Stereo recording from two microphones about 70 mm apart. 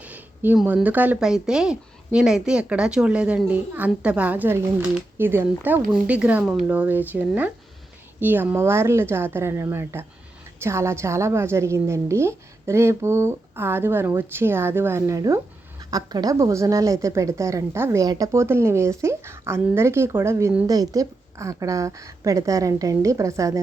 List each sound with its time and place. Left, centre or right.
0.0 s speech: right
1.2 s a woman's voice: centre; by 5.8 s right
5.9 s speech: centre
6.4 s speech: centre
6.7 s a woman's voice: right
15.8 s speech: right
18.0 s a woman's voice: right
20.7 s speech: right